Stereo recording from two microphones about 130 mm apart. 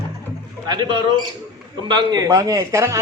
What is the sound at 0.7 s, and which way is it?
Speech, 35° right (ahead or behind).